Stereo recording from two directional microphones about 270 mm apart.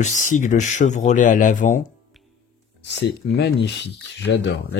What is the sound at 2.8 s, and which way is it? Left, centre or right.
Speech, left.